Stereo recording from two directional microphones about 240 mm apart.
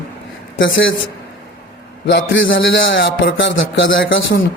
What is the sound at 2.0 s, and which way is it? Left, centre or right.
A man's voice, left.